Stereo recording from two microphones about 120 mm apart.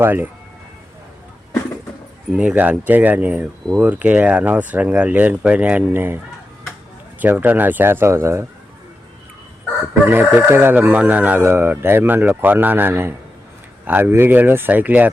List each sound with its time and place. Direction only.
0.0 s speech: 15° right (ahead or behind)
2.3 s speech: 10° right (ahead or behind)
7.2 s speech: 15° right (ahead or behind)
10.1 s speech: 15° right (ahead or behind)